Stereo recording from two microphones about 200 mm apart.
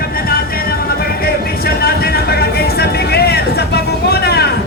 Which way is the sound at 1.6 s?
50° left (ahead or behind).